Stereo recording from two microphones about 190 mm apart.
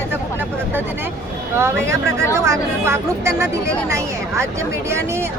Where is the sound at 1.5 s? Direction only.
15° right (ahead or behind).